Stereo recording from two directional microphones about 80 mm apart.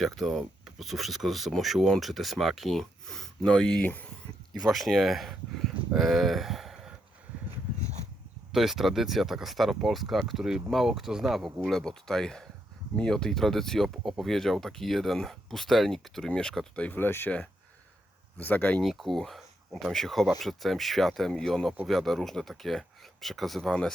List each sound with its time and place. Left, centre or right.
0.0 s speech: centre
4.5 s speech: centre
8.5 s speech: centre
17.0 s speech: left
18.3 s speech: left
18.8 s speech: centre